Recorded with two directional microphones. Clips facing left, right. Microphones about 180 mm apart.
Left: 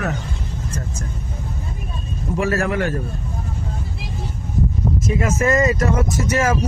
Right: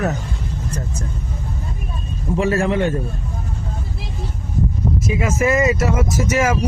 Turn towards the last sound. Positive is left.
turn(degrees=-10)  # may be behind; listen again after turning